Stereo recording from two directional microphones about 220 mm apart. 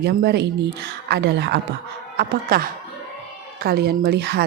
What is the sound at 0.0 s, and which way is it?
Speech, 45° right (ahead or behind).